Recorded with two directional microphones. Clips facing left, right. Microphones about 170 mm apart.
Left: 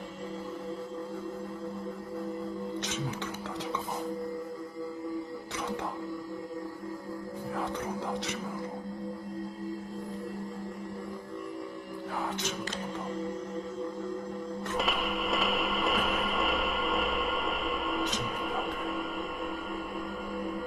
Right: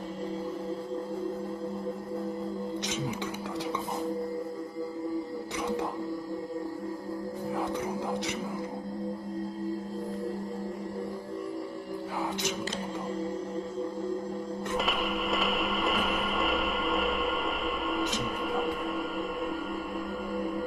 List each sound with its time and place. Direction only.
14.8 s music: centre (ahead or behind)